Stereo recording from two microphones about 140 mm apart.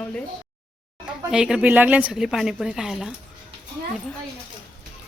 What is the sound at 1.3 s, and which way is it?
A woman's voice, 5° right (ahead or behind).